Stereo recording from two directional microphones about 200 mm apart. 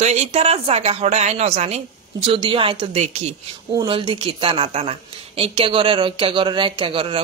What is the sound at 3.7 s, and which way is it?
A woman's voice, 20° right (ahead or behind).